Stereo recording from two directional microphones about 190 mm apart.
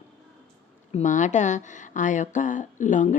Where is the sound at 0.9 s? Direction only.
40° left (ahead or behind).